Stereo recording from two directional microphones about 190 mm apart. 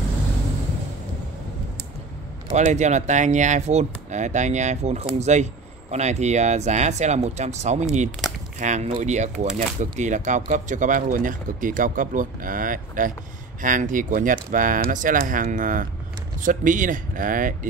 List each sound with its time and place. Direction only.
2.5 s speech: 40° right (ahead or behind)